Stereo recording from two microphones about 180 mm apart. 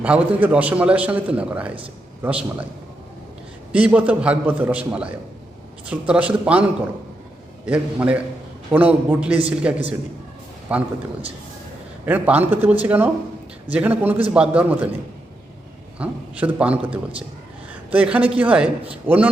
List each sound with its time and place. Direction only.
0.0 s a man's voice: 10° right (ahead or behind)
3.7 s a man's voice: 5° right (ahead or behind)
16.0 s a man's voice: 10° right (ahead or behind)